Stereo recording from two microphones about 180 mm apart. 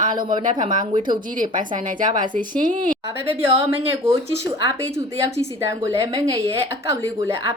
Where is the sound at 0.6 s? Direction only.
45° right (ahead or behind).